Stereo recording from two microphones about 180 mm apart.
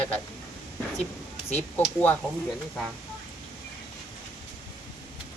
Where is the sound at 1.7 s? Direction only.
10° left (ahead or behind).